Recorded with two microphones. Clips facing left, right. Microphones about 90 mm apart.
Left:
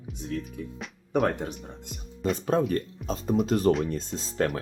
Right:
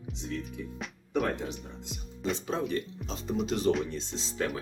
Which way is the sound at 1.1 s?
55° left (ahead or behind).